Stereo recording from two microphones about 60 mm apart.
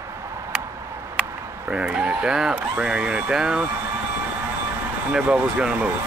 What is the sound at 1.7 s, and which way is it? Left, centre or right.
Speech, centre.